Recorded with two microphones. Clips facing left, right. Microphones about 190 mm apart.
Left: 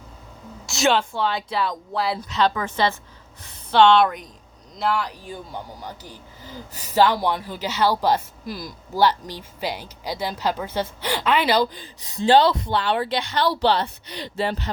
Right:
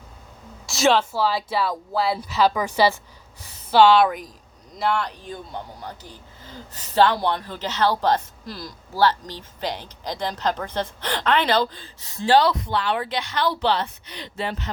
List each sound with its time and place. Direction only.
0.7 s speech: centre (ahead or behind)
6.5 s a woman's voice: 10° left (ahead or behind); by 14.7 s 35° left (ahead or behind)